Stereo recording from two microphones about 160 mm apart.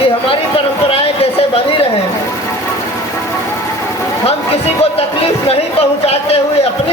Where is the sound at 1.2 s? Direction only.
40° left (ahead or behind).